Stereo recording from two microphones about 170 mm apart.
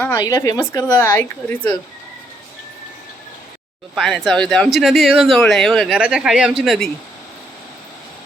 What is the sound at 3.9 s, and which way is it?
Speech, centre (ahead or behind).